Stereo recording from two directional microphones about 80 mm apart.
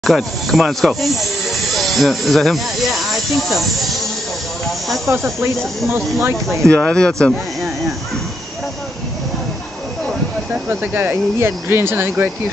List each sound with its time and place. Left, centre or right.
0.0 s speech: centre
6.6 s speech: centre
10.5 s speech: right